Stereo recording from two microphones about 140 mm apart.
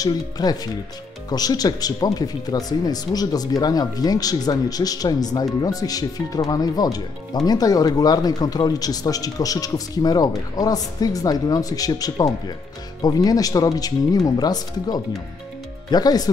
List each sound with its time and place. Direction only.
0.0 s speech: 25° left (ahead or behind)